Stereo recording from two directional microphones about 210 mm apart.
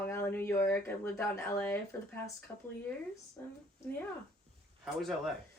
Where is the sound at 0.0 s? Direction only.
10° left (ahead or behind).